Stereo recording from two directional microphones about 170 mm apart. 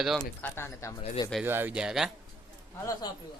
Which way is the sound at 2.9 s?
25° left (ahead or behind).